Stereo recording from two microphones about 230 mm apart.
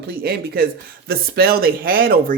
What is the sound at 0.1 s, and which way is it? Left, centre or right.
Speech, right.